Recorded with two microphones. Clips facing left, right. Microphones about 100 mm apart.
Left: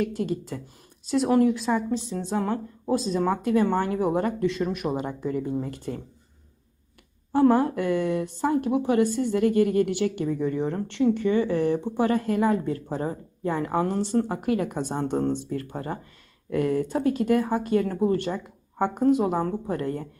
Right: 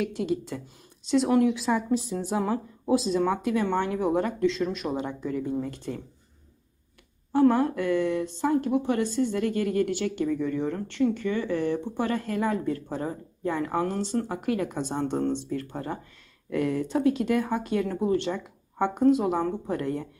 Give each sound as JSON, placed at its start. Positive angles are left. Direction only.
{"t": 0.2, "sound": "speech", "side_deg": 0}
{"t": 7.3, "sound": "speech", "side_deg": 10}
{"t": 14.3, "sound": "speech", "side_deg": 5}